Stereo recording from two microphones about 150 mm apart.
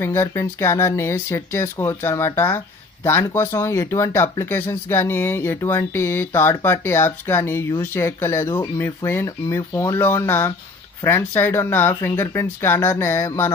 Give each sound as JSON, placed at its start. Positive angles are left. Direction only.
{"t": 0.0, "sound": "speech", "side_deg": 15}